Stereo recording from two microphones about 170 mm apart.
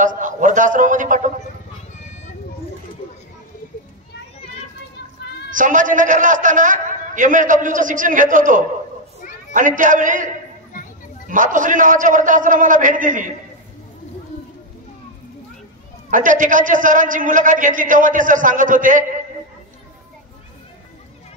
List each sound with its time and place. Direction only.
0.0 s a man's voice: 50° right (ahead or behind)
5.5 s a man's voice: 50° right (ahead or behind)
16.1 s a man's voice: 50° right (ahead or behind)